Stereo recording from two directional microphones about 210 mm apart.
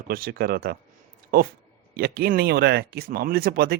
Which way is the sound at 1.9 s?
45° right (ahead or behind).